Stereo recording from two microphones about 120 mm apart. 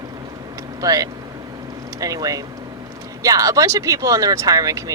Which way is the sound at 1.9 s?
30° right (ahead or behind).